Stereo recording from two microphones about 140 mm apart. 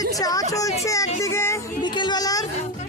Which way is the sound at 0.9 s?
25° left (ahead or behind).